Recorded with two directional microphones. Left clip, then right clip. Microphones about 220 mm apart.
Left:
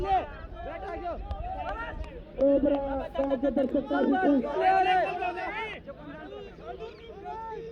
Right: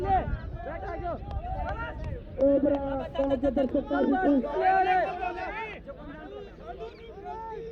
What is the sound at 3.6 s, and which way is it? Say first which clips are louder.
Speech: even; 25° left (ahead or behind).